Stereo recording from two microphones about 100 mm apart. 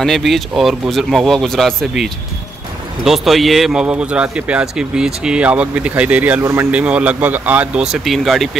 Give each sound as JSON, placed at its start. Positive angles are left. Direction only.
{"t": 0.0, "sound": "speech", "side_deg": 0}
{"t": 3.8, "sound": "speech", "side_deg": -10}
{"t": 6.4, "sound": "a man's voice", "side_deg": -30}
{"t": 6.7, "sound": "speech", "side_deg": -10}